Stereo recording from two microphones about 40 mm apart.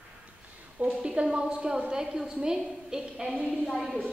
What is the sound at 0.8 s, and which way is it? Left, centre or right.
A woman's voice, right.